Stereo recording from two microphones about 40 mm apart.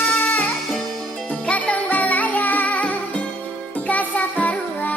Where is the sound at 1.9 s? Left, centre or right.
Left.